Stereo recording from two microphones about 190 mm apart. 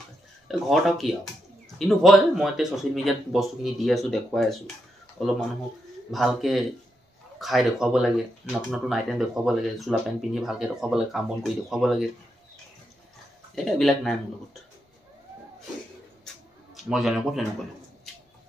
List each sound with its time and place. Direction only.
0.5 s speech: centre (ahead or behind)
13.7 s speech: centre (ahead or behind)
16.7 s a man's voice: centre (ahead or behind)